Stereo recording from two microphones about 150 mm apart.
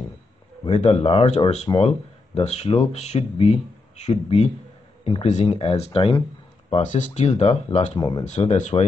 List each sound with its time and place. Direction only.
0.7 s speech: 45° left (ahead or behind)
6.7 s speech: 55° left (ahead or behind)
8.0 s speech: 25° left (ahead or behind)
8.3 s speech: 50° left (ahead or behind)